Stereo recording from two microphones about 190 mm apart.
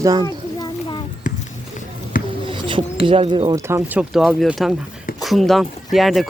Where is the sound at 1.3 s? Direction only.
45° left (ahead or behind).